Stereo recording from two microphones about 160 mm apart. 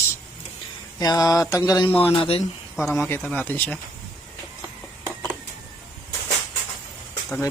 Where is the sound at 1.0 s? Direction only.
25° left (ahead or behind).